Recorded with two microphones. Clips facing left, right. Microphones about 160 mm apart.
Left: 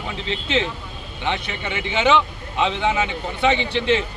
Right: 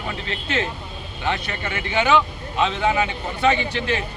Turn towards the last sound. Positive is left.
turn(degrees=20)  # may be behind; listen again after turning